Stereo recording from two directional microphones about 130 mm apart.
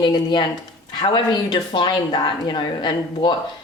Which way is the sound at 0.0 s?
35° left (ahead or behind).